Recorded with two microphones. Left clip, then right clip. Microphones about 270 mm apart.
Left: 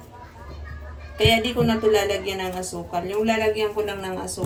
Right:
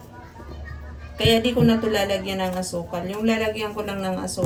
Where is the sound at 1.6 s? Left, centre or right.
Left.